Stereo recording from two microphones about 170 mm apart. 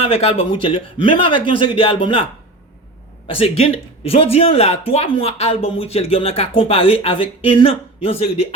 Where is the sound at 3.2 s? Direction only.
35° left (ahead or behind).